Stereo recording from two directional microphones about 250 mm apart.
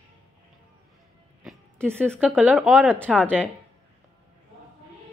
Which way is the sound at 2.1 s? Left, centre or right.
Centre.